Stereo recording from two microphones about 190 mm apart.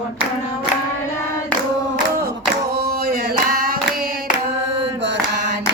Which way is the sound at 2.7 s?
55° right (ahead or behind).